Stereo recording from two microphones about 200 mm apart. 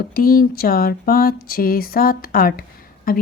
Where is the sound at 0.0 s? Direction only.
45° left (ahead or behind).